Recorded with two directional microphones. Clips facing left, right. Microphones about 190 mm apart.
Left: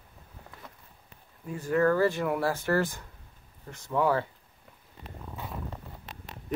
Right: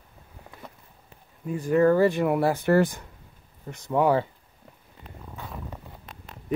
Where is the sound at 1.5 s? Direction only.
15° right (ahead or behind).